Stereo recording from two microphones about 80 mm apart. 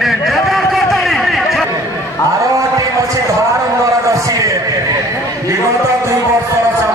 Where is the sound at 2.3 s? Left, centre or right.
Right.